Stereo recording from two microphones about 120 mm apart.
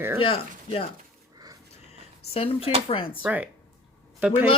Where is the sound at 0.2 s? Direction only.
50° left (ahead or behind).